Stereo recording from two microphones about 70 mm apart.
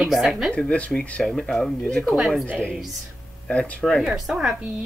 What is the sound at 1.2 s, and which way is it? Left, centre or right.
Speech, centre.